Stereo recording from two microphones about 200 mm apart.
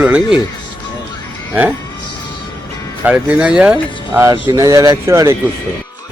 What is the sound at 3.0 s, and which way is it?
Speech, 10° right (ahead or behind).